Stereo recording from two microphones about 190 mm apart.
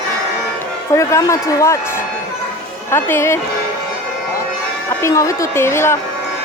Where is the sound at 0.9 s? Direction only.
15° left (ahead or behind).